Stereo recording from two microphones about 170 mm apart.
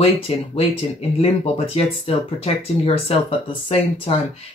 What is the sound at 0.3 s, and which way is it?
Speech, 35° left (ahead or behind).